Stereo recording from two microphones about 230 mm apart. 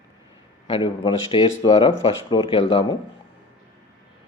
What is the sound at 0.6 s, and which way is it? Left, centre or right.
A man's voice, left.